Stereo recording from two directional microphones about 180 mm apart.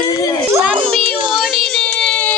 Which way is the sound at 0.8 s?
30° right (ahead or behind).